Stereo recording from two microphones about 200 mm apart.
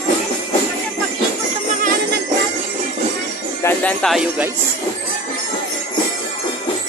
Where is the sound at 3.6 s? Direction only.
10° left (ahead or behind).